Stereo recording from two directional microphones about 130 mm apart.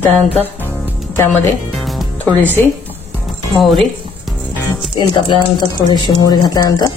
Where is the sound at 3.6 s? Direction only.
Centre (ahead or behind).